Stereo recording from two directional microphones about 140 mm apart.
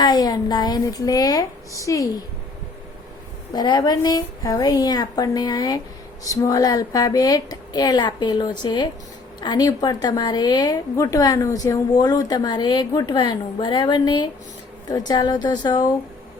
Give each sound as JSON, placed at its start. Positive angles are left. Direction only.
{"t": 0.0, "sound": "a woman's voice", "side_deg": 30}
{"t": 3.5, "sound": "a woman's voice", "side_deg": 30}